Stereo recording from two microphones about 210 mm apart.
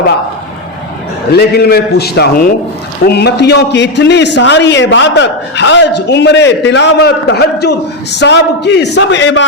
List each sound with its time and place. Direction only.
1.3 s a man's voice: 50° left (ahead or behind)